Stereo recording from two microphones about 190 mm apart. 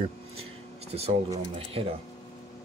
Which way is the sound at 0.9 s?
30° right (ahead or behind).